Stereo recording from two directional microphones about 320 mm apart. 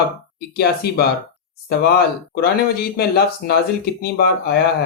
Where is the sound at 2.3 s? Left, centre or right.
Left.